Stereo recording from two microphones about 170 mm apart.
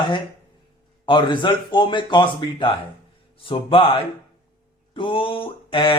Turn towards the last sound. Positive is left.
turn(degrees=30)  # may be behind; listen again after turning